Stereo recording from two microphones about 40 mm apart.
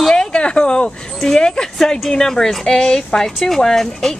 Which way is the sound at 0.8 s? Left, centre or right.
Centre.